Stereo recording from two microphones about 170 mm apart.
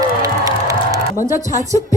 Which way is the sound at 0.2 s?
20° right (ahead or behind).